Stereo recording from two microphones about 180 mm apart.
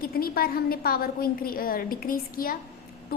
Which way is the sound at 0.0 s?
55° left (ahead or behind).